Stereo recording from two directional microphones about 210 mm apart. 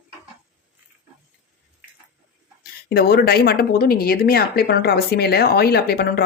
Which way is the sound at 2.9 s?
50° left (ahead or behind).